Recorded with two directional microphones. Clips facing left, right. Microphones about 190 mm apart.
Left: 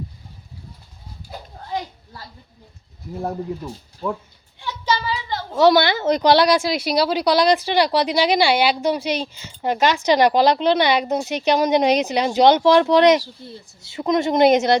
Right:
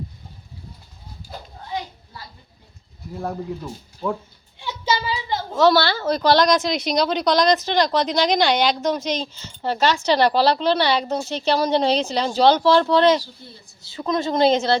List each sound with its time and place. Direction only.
3.2 s speech: 15° left (ahead or behind)
4.6 s a sound: 15° right (ahead or behind)
5.5 s speech: 15° left (ahead or behind)